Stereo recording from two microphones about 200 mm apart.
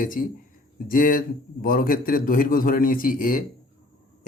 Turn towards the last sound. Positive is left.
turn(degrees=45)  # may be behind; listen again after turning